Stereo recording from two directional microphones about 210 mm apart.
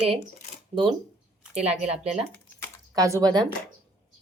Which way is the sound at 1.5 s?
30° right (ahead or behind).